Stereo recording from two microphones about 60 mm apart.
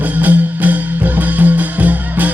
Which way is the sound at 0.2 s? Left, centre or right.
Right.